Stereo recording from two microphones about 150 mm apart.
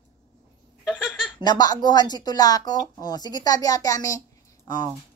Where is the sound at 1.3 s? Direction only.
25° left (ahead or behind).